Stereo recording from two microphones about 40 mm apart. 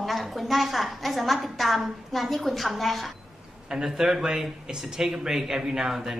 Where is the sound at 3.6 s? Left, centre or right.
Centre.